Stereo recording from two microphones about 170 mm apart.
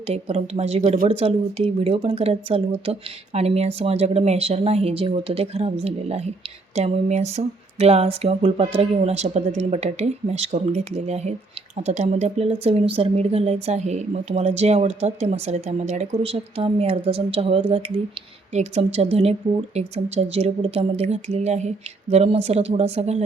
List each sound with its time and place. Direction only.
0.1 s speech: 35° right (ahead or behind)
1.0 s speech: 35° right (ahead or behind)